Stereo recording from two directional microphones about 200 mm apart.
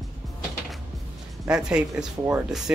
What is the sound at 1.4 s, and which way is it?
Speech, 5° right (ahead or behind).